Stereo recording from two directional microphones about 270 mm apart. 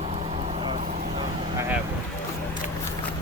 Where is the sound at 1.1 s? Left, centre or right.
Centre.